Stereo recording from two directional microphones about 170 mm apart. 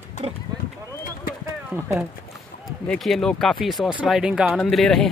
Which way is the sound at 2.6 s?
Centre (ahead or behind).